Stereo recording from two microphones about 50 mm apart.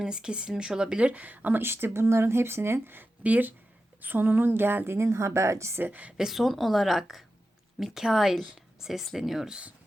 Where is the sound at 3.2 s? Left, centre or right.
Right.